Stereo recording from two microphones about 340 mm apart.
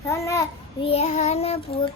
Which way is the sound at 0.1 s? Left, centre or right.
Centre.